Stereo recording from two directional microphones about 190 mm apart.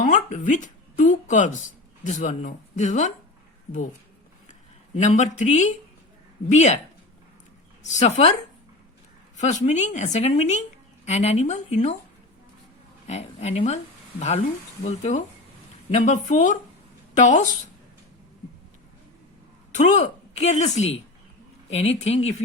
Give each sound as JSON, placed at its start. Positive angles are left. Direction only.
{"t": 0.0, "sound": "speech", "side_deg": 40}
{"t": 4.9, "sound": "a woman's voice", "side_deg": 40}
{"t": 7.9, "sound": "a woman's voice", "side_deg": 35}
{"t": 9.4, "sound": "a woman's voice", "side_deg": 40}
{"t": 13.1, "sound": "a woman's voice", "side_deg": 35}
{"t": 19.7, "sound": "a woman's voice", "side_deg": 40}